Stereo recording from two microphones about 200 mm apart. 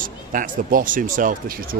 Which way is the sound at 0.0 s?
40° right (ahead or behind).